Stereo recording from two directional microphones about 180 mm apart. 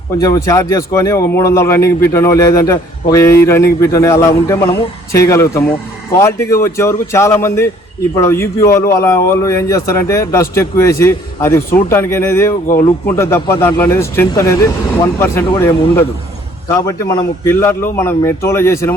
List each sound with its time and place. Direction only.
0.2 s speech: 20° left (ahead or behind)